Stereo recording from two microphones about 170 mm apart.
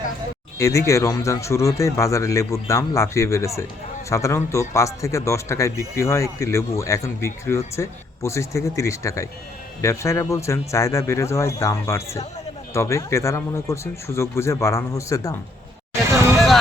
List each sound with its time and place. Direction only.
0.6 s speech: 15° left (ahead or behind)